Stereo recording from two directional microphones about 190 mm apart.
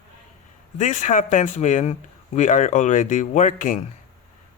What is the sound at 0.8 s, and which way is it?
Speech, 40° left (ahead or behind).